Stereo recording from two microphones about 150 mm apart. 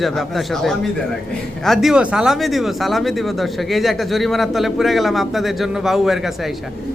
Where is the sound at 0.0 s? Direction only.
Centre (ahead or behind).